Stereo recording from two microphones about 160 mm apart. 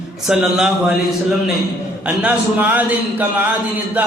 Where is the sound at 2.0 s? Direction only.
10° right (ahead or behind).